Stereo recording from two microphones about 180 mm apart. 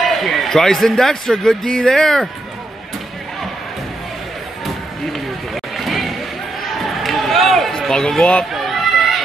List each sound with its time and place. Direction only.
0.0 s a man's voice: centre (ahead or behind)
5.1 s run: centre (ahead or behind)
6.8 s a sound: centre (ahead or behind)